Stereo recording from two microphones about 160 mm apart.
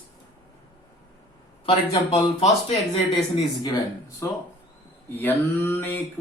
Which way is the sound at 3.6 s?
20° left (ahead or behind).